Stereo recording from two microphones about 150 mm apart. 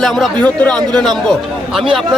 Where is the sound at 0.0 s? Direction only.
5° left (ahead or behind).